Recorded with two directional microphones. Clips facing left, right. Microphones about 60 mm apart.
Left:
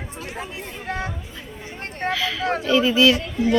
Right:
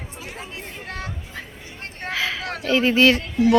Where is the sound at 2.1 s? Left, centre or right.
Right.